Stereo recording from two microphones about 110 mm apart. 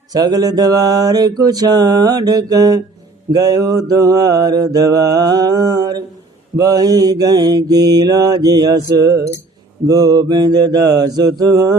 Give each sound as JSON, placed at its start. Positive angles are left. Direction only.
{"t": 0.1, "sound": "mantra", "side_deg": -35}